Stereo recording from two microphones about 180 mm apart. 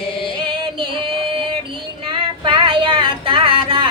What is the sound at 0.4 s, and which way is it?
Music, 25° right (ahead or behind).